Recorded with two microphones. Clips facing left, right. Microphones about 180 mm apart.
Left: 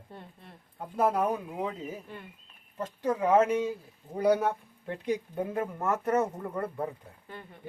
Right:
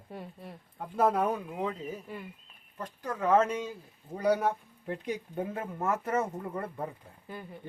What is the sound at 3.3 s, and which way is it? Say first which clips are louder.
Speech: left 1 dB; 10° left (ahead or behind).